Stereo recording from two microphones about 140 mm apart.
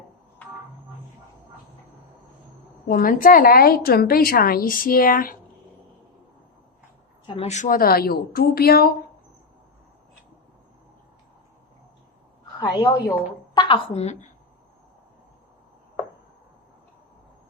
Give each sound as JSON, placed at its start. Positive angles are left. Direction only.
{"t": 2.8, "sound": "a woman's voice", "side_deg": 85}
{"t": 7.4, "sound": "a woman's voice", "side_deg": 60}
{"t": 12.5, "sound": "a woman's voice", "side_deg": 30}